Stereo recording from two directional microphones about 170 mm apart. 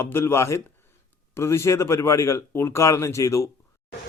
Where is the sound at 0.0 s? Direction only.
15° left (ahead or behind).